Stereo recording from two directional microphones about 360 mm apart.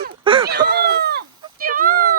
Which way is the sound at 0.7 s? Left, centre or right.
Right.